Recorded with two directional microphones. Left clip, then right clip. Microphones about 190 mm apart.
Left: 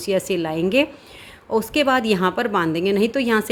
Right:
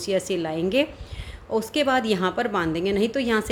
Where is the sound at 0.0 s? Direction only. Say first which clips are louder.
Left 3 dB; 20° left (ahead or behind).